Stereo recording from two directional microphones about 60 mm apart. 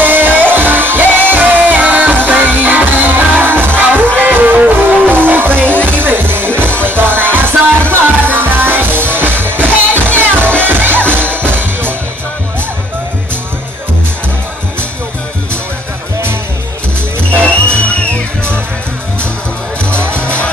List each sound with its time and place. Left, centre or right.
0.0 s music: right
20.0 s music: right